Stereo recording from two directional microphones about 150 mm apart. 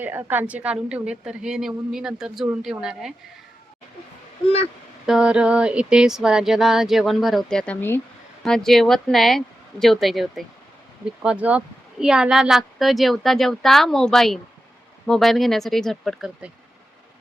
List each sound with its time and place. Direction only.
0.0 s speech: 15° right (ahead or behind)
4.4 s speech: 45° left (ahead or behind)
5.0 s speech: 5° right (ahead or behind); by 8.0 s 15° left (ahead or behind)
8.4 s speech: 5° left (ahead or behind)